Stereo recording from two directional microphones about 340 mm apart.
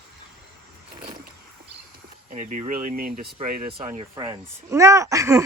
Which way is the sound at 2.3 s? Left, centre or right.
Right.